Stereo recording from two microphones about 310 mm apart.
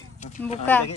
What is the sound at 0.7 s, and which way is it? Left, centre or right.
Speech, centre.